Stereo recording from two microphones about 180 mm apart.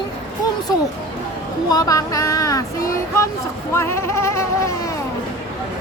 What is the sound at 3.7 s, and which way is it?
Music, 15° left (ahead or behind).